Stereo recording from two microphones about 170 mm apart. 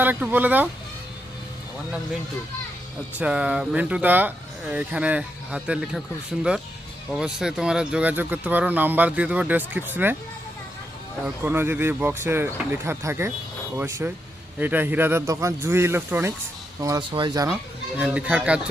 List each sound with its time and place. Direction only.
0.0 s speech: 10° right (ahead or behind)
3.2 s speech: 5° right (ahead or behind)
7.1 s speech: 5° right (ahead or behind)
11.4 s speech: 10° right (ahead or behind)
16.8 s speech: 25° right (ahead or behind)
17.5 s speech: 10° right (ahead or behind)